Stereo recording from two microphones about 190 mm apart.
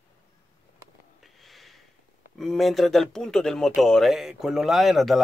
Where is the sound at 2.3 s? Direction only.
Centre (ahead or behind).